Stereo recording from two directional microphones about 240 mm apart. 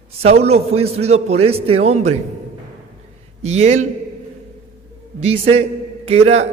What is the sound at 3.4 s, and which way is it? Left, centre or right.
Speech, right.